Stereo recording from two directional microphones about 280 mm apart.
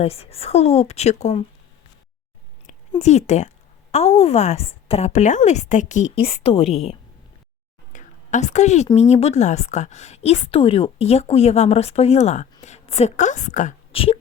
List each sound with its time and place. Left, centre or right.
0.0 s speech: left
2.9 s speech: left
7.9 s a woman's voice: left